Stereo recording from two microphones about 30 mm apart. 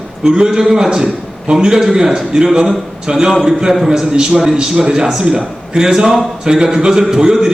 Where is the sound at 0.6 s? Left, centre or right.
Centre.